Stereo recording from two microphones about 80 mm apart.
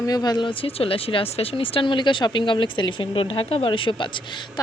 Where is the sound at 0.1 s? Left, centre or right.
Left.